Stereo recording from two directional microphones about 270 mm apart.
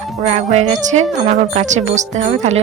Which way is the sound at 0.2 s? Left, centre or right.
Right.